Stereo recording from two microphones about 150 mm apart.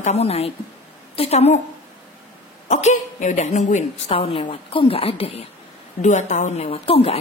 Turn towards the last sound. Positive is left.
turn(degrees=40)  # may be behind; listen again after turning